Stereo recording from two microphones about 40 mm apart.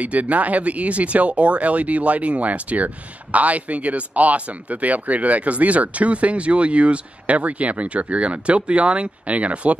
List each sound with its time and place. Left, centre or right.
0.0 s speech: right